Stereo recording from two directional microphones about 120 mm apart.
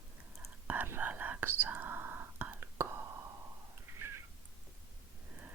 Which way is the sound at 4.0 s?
20° right (ahead or behind).